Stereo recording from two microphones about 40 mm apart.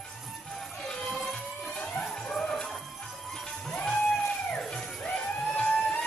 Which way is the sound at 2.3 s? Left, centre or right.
Centre.